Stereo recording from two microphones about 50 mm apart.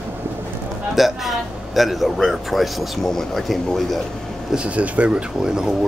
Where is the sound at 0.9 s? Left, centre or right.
Centre.